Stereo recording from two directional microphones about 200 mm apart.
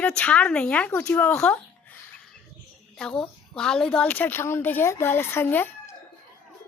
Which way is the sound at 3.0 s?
5° left (ahead or behind).